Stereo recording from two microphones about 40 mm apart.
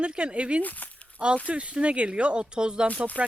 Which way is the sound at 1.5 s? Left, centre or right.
Right.